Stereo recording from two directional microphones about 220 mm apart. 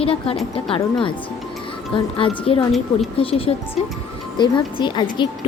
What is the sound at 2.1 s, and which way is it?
Speech, 25° left (ahead or behind).